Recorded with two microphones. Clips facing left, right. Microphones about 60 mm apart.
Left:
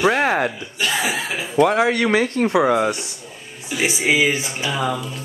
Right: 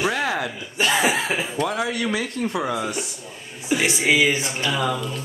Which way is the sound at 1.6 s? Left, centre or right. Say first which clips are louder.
Left 11 dB; left.